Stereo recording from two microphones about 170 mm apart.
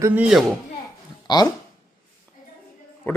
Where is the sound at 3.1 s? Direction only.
10° left (ahead or behind).